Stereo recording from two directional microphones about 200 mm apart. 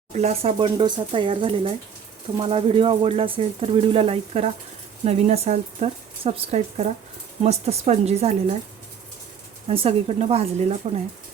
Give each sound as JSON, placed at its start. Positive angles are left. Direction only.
{"t": 0.1, "sound": "speech", "side_deg": -35}
{"t": 9.6, "sound": "speech", "side_deg": -30}